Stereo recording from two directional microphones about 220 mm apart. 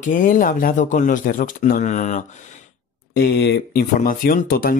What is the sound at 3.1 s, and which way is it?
Speech, 50° left (ahead or behind).